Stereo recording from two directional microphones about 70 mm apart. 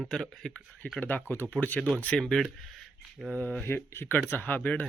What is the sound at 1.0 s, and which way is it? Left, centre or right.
Speech, left.